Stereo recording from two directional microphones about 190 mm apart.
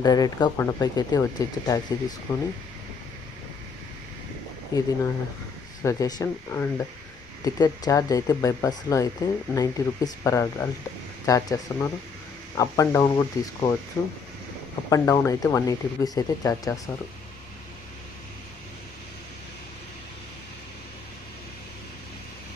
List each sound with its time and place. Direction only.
0.0 s speech: 20° left (ahead or behind)
4.7 s speech: 20° left (ahead or behind)